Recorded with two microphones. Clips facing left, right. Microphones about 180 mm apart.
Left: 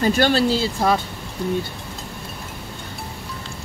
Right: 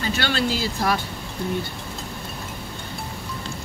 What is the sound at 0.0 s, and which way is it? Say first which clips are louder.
Speech: left 7 dB; 45° left (ahead or behind).